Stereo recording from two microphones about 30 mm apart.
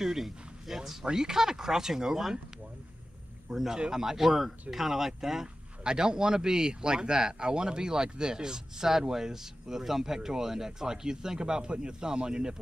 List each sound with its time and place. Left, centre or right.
0.0 s speech: centre
3.5 s speech: centre
5.9 s speech: right